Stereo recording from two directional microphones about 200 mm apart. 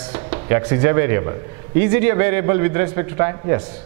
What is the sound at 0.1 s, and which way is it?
A man's voice, 15° right (ahead or behind).